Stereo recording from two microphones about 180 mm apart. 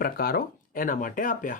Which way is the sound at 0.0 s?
55° left (ahead or behind).